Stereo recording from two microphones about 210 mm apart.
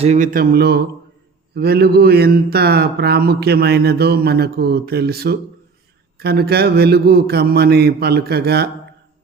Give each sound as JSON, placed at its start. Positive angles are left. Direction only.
{"t": 0.0, "sound": "speech", "side_deg": -35}